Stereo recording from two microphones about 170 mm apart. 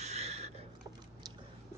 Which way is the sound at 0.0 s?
40° right (ahead or behind).